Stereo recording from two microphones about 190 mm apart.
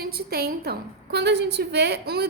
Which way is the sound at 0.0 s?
55° right (ahead or behind).